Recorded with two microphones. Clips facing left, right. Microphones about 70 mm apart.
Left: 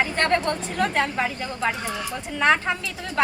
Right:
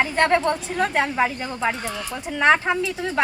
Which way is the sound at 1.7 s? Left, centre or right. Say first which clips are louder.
Even; centre.